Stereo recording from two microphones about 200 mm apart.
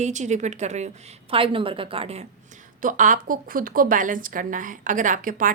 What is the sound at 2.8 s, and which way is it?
Speech, 40° right (ahead or behind).